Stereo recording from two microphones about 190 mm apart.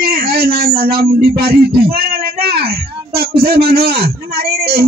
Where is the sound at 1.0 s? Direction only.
55° right (ahead or behind).